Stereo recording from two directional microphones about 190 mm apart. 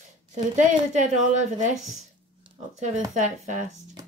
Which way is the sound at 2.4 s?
35° right (ahead or behind).